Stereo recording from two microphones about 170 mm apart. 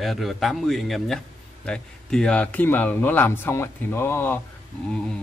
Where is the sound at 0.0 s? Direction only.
Centre (ahead or behind).